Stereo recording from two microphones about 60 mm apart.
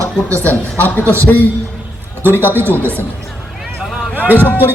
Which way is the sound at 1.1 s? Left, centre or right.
Left.